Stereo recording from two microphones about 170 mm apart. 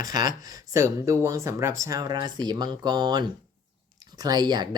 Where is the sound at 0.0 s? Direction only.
20° right (ahead or behind).